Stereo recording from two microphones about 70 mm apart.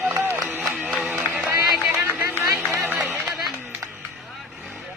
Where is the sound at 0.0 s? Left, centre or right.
Right.